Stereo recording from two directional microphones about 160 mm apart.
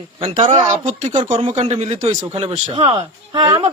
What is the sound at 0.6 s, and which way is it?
A man's voice, 50° right (ahead or behind).